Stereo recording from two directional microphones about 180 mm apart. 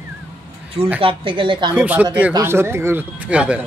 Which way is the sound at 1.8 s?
10° right (ahead or behind).